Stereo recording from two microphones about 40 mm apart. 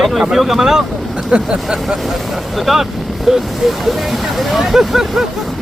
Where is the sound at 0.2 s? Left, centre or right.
Centre.